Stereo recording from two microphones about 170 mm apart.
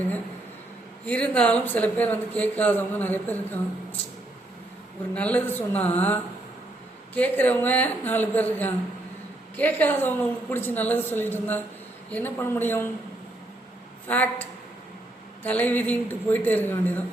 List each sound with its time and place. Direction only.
1.0 s speech: 10° left (ahead or behind)
5.1 s speech: 10° left (ahead or behind)
14.1 s speech: 10° left (ahead or behind)
15.4 s speech: 10° left (ahead or behind)